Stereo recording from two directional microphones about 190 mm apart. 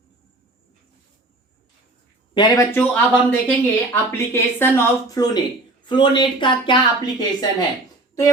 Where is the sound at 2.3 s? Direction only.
20° left (ahead or behind).